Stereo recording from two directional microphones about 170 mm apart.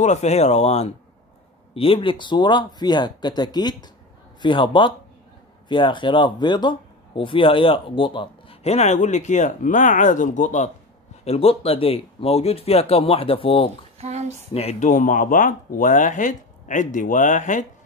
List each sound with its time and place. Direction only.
0.0 s speech: 40° left (ahead or behind)
11.2 s speech: 35° left (ahead or behind)
13.9 s a sound: 40° right (ahead or behind)
14.5 s speech: 35° left (ahead or behind)